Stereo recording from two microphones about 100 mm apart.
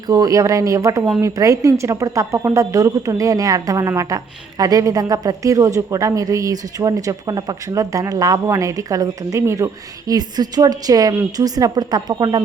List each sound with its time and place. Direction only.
0.1 s a woman's voice: 35° right (ahead or behind)